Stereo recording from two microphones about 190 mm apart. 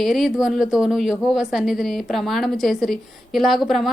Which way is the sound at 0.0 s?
Centre (ahead or behind).